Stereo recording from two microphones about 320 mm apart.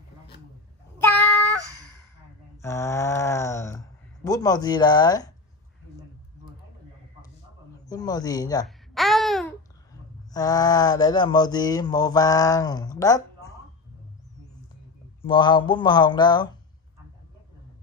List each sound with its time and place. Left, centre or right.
2.6 s a sound: centre
7.8 s speech: centre
8.6 s babbling: centre
10.3 s speech: centre
15.2 s speech: centre